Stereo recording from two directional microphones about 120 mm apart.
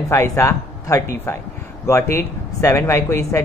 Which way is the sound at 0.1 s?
25° left (ahead or behind).